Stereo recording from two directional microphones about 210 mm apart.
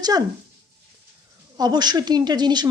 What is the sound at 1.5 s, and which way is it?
Speech, 20° right (ahead or behind).